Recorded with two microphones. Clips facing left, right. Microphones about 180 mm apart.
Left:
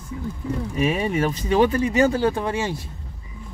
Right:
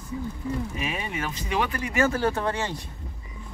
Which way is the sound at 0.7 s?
40° left (ahead or behind).